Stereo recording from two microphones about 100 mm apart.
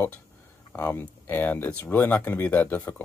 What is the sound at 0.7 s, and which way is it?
Speech, 20° left (ahead or behind).